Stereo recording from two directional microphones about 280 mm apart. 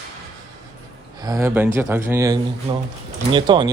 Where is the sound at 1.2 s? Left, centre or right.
Centre.